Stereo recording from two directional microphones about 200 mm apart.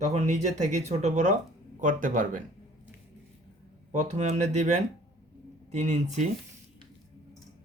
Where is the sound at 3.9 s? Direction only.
35° right (ahead or behind).